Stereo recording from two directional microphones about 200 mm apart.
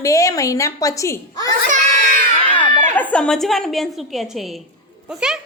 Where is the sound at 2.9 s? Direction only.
5° left (ahead or behind).